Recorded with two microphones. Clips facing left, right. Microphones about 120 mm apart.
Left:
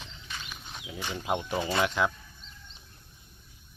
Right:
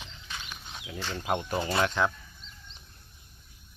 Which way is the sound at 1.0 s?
15° left (ahead or behind).